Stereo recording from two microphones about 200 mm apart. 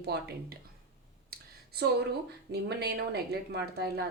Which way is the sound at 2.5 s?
55° right (ahead or behind).